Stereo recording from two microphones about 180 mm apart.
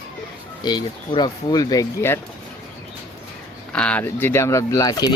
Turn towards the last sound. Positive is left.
turn(degrees=20)  # may be behind; listen again after turning